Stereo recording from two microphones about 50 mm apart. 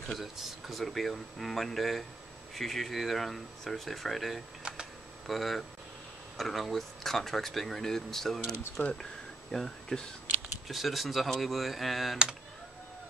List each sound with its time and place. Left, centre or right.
0.2 s speech: centre
8.8 s speech: left
9.5 s speech: centre
10.7 s speech: centre